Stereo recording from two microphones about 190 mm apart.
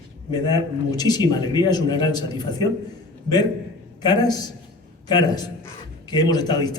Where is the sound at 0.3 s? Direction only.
20° left (ahead or behind).